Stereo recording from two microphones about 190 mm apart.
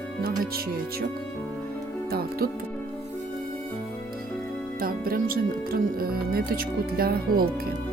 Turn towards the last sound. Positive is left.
turn(degrees=-50)  # may be behind; listen again after turning